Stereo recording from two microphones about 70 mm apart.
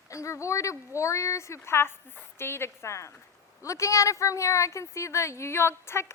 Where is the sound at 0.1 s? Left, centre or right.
Left.